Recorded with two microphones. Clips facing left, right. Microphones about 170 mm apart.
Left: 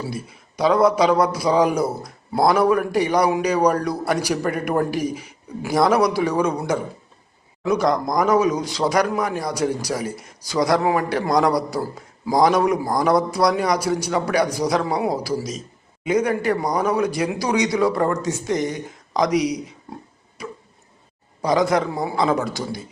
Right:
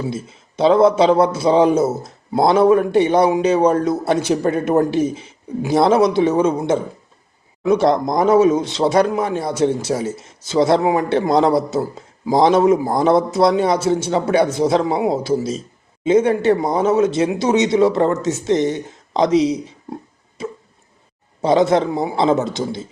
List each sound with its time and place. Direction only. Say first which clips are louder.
0.0 s speech: right 5 dB; 25° right (ahead or behind)
20.4 s a sound: right 6 dB; 25° right (ahead or behind)
21.4 s speech: right 4 dB; 25° right (ahead or behind)